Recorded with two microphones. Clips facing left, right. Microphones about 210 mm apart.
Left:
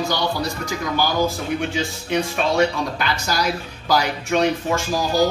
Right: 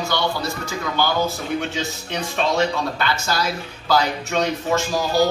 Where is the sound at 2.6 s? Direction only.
15° left (ahead or behind).